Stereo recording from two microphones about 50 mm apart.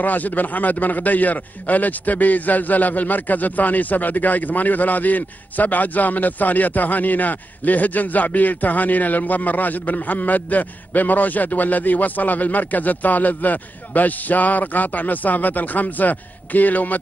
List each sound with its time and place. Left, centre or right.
0.0 s a man's voice: left